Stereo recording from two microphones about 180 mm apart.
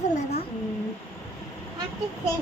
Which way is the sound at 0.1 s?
40° left (ahead or behind).